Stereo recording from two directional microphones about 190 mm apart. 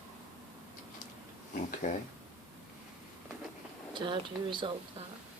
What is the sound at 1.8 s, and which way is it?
Speech, 40° left (ahead or behind).